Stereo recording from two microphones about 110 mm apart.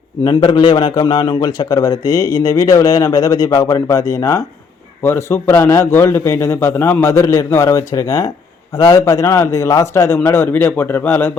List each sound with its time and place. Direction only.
0.3 s a man's voice: 45° left (ahead or behind); by 11.3 s 20° left (ahead or behind)